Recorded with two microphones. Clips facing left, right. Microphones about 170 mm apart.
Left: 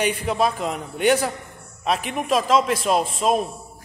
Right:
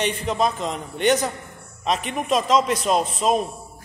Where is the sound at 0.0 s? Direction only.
10° left (ahead or behind).